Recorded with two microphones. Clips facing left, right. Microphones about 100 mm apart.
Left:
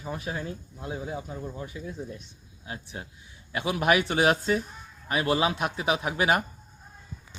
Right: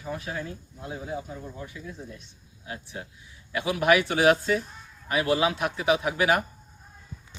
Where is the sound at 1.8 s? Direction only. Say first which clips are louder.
Left 3 dB; 25° left (ahead or behind).